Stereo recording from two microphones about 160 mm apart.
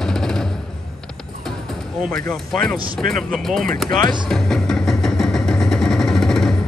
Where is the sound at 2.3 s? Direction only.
5° left (ahead or behind).